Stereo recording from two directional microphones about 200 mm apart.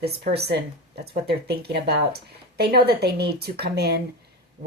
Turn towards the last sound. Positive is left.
turn(degrees=-55)  # may be behind; listen again after turning